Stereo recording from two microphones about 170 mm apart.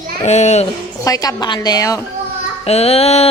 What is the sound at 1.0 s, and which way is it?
A woman's voice, 20° left (ahead or behind).